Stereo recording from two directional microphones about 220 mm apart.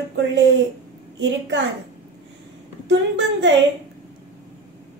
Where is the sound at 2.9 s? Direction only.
55° right (ahead or behind).